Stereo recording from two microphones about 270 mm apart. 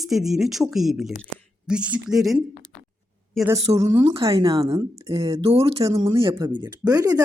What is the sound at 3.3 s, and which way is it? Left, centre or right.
Speech, centre.